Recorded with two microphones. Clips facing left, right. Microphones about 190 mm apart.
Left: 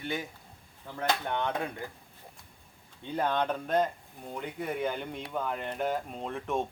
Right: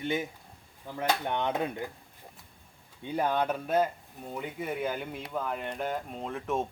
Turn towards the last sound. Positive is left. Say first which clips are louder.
# even
turn(degrees=0)  # may be behind; listen again after turning